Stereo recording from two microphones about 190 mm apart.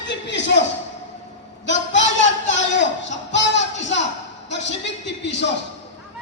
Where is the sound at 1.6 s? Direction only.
70° left (ahead or behind).